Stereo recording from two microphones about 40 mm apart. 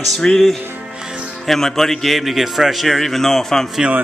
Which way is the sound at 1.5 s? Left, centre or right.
Centre.